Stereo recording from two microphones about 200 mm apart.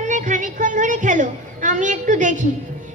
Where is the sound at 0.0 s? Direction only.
40° right (ahead or behind).